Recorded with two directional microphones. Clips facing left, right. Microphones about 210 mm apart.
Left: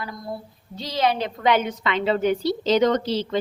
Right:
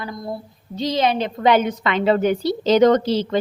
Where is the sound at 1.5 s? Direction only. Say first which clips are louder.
Right 4 dB; 40° right (ahead or behind).